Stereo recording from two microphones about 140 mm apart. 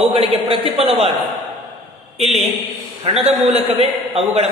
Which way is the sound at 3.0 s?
45° right (ahead or behind).